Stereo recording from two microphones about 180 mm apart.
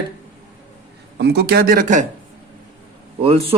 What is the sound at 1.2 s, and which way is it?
Speech, 65° right (ahead or behind).